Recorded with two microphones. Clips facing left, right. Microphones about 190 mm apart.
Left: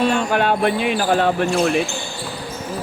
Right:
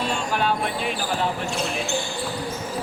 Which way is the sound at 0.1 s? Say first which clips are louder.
Left 6 dB; 65° left (ahead or behind).